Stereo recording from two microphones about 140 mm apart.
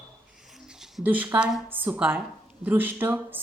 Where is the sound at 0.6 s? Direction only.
5° right (ahead or behind).